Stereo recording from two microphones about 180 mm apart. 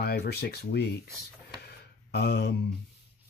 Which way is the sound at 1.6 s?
65° left (ahead or behind).